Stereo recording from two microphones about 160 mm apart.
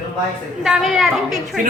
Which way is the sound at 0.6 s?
5° right (ahead or behind).